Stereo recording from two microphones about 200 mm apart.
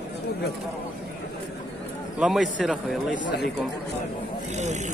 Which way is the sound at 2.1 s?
Centre (ahead or behind).